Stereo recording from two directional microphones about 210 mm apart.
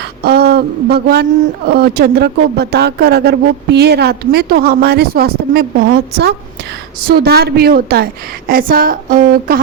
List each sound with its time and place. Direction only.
0.3 s a man's voice: 50° right (ahead or behind)